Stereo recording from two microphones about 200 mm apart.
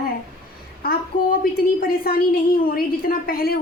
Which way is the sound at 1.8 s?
45° left (ahead or behind).